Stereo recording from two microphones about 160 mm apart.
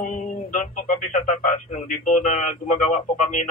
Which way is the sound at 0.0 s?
55° left (ahead or behind).